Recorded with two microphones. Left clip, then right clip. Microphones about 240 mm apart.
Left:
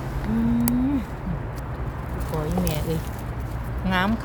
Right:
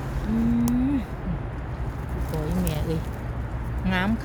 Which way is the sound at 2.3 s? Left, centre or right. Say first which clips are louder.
Left 3 dB; centre.